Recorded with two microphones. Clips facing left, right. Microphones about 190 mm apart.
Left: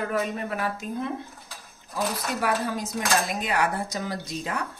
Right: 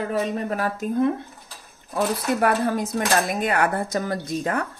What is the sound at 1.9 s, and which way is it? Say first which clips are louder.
Speech: right 6 dB; 55° right (ahead or behind).